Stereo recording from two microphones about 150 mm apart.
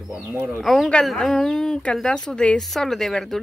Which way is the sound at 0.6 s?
Centre (ahead or behind).